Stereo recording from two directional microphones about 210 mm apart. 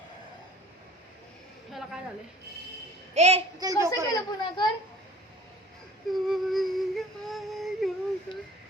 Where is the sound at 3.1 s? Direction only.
30° right (ahead or behind).